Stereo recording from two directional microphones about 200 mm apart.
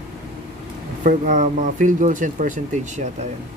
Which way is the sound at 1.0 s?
40° right (ahead or behind).